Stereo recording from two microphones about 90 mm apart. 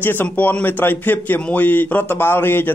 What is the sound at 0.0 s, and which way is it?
A man's voice, 20° left (ahead or behind).